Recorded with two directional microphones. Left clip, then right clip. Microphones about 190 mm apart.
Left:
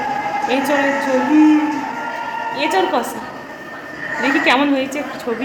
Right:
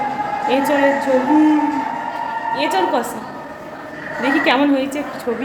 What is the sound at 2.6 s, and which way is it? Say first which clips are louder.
Speech: left 1 dB; centre (ahead or behind).